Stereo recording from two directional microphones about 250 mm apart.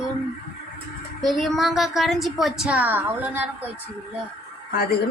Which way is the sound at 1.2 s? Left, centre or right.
Centre.